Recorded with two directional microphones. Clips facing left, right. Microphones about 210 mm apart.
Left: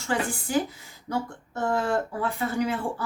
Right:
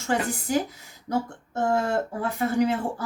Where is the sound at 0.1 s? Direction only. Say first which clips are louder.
Right 1 dB; 45° right (ahead or behind).